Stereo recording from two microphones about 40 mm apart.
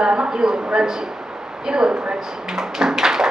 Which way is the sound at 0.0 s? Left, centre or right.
Right.